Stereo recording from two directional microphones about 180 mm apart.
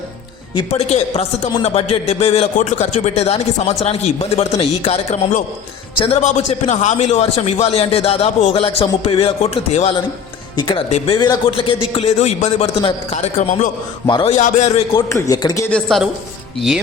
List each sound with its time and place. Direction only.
0.5 s a man's voice: 35° left (ahead or behind)
14.1 s a man's voice: 30° left (ahead or behind)
15.1 s speech: 20° left (ahead or behind)
15.6 s a woman's voice: 5° left (ahead or behind)